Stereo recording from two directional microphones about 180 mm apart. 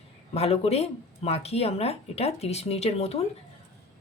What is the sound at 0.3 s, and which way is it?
Speech, 35° left (ahead or behind).